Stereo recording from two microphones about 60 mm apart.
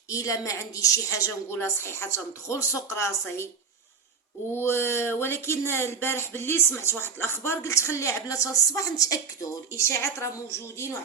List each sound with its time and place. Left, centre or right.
0.1 s a woman's voice: left
1.6 s speech: left
4.5 s speech: left
9.7 s speech: left